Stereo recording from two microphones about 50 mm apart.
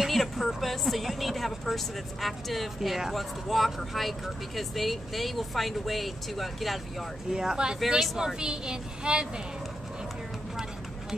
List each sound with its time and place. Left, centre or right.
0.0 s a woman's voice: centre
7.2 s a woman's voice: centre
10.5 s a sound: centre